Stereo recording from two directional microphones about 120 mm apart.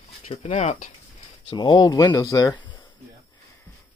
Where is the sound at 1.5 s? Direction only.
40° left (ahead or behind).